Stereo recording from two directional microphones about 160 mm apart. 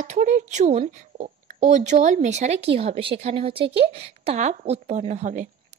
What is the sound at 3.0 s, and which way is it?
A woman's voice, 35° right (ahead or behind).